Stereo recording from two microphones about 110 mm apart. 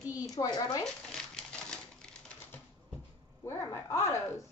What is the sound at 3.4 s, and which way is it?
Speech, 30° left (ahead or behind).